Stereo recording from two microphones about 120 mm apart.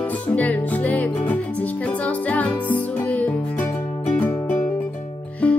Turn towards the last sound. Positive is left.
turn(degrees=10)  # may be behind; listen again after turning